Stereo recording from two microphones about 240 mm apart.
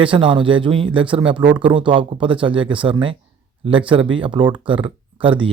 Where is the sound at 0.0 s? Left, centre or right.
Right.